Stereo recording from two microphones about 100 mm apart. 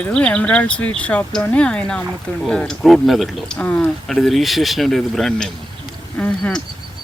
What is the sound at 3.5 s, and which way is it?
Speech, 15° left (ahead or behind).